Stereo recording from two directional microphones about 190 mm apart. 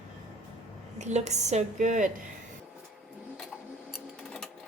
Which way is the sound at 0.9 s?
35° right (ahead or behind).